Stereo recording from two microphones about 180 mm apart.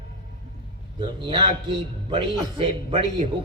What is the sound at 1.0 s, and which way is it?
A man's voice, 25° right (ahead or behind).